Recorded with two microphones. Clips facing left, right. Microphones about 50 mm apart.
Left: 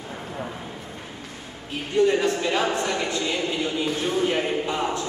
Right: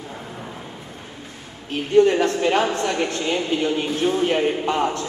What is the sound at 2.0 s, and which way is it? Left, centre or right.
A man's voice, right.